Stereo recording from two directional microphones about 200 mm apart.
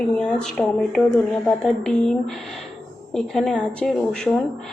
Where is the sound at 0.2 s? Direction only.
5° left (ahead or behind).